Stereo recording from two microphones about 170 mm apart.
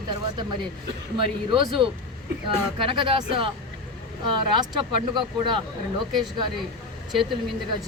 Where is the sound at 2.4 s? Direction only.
30° right (ahead or behind).